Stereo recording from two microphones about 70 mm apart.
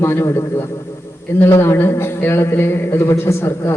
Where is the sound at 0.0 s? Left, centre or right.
Left.